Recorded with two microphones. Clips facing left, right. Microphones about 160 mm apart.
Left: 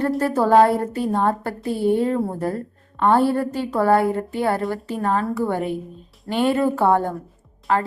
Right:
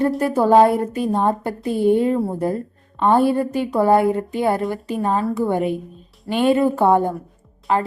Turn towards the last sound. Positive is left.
turn(degrees=-20)  # may be behind; listen again after turning